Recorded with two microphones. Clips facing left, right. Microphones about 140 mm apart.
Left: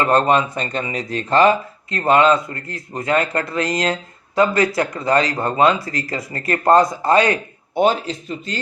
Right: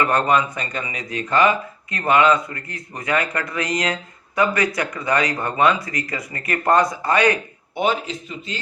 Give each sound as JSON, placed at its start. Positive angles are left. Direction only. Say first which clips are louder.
{"t": 0.0, "sound": "speech", "louder": "left 3 dB", "side_deg": 25}